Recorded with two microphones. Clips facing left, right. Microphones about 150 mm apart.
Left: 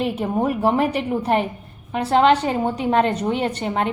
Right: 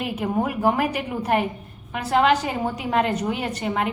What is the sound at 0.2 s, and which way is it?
A woman's voice, 30° left (ahead or behind).